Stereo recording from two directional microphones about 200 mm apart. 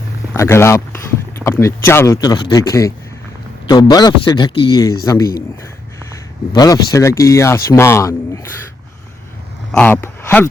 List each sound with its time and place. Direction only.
0.3 s speech: 15° left (ahead or behind)
6.5 s speech: 20° left (ahead or behind)
9.7 s speech: 10° left (ahead or behind)